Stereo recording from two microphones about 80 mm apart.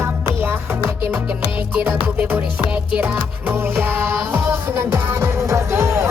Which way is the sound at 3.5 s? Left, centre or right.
Right.